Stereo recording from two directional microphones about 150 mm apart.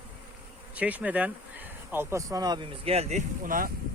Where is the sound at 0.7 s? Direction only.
10° right (ahead or behind); by 2.6 s 25° right (ahead or behind).